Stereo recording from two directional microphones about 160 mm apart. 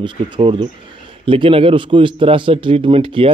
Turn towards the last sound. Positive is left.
turn(degrees=-35)  # may be behind; listen again after turning